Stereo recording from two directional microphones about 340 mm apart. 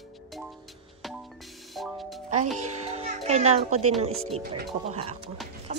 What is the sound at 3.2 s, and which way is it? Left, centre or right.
Speech, centre.